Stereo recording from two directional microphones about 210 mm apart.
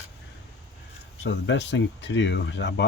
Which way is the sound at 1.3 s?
60° left (ahead or behind).